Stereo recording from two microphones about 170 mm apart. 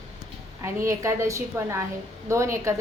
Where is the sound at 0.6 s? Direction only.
15° right (ahead or behind).